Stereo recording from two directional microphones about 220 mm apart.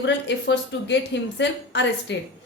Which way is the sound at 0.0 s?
55° left (ahead or behind).